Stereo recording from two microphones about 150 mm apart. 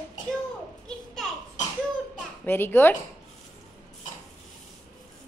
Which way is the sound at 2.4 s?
15° left (ahead or behind).